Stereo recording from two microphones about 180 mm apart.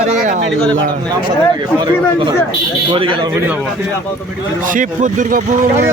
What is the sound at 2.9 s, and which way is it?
Speech, 30° right (ahead or behind).